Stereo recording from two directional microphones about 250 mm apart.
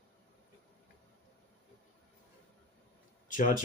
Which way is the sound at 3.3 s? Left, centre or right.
Left.